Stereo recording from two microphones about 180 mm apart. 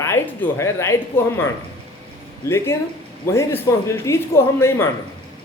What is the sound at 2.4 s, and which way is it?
A man's voice, 15° left (ahead or behind).